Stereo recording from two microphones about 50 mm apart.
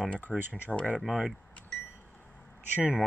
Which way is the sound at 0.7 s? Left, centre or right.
Left.